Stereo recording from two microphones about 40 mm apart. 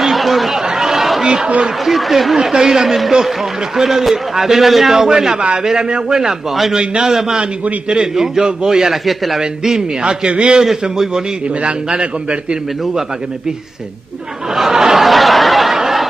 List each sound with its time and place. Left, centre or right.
0.0 s chatter: centre
1.2 s a man's voice: centre
1.9 s speech: centre
2.3 s a man's voice: centre
9.0 s speech: centre
9.6 s a man's voice: centre
10.6 s a man's voice: centre
11.6 s a man's voice: right
14.5 s a sound: centre
15.0 s a sound: centre